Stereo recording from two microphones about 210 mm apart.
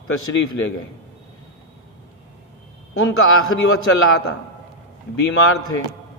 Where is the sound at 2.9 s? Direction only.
75° left (ahead or behind).